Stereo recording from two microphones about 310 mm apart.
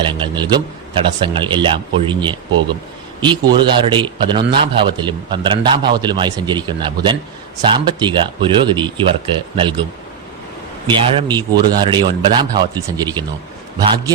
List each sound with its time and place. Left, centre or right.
0.0 s a man's voice: centre
10.8 s a man's voice: centre